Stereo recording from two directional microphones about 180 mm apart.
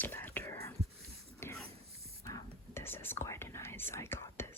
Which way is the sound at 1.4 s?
15° left (ahead or behind).